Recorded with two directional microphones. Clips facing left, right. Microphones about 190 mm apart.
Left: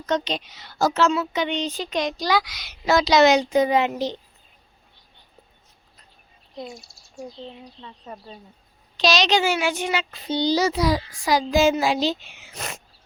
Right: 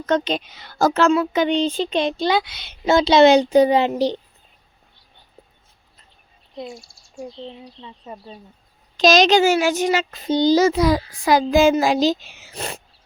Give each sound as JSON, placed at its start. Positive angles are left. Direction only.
{"t": 0.0, "sound": "speech", "side_deg": -55}
{"t": 1.5, "sound": "speech", "side_deg": -30}
{"t": 6.6, "sound": "speech", "side_deg": 0}
{"t": 9.0, "sound": "speech", "side_deg": -45}